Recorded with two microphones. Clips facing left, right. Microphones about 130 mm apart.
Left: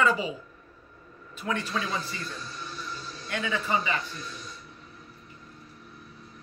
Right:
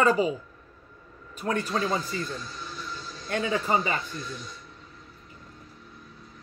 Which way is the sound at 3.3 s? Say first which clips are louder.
Right 3 dB; 40° right (ahead or behind).